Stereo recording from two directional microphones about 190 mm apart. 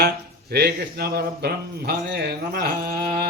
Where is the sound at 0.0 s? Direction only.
55° right (ahead or behind).